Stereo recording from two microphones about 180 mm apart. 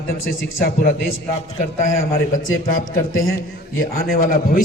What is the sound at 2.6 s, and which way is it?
A man's voice, 50° left (ahead or behind).